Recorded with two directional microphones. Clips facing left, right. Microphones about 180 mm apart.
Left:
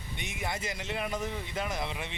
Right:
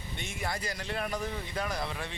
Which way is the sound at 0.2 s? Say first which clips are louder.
Even; 20° left (ahead or behind).